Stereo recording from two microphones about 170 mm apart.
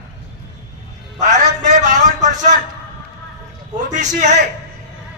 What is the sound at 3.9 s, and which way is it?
Speech, 45° right (ahead or behind).